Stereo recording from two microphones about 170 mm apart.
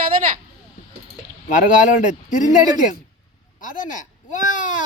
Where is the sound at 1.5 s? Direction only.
50° left (ahead or behind).